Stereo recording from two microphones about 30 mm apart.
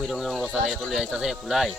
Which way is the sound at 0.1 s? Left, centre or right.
Centre.